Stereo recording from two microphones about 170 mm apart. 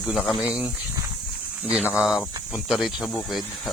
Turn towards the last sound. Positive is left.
turn(degrees=0)  # may be behind; listen again after turning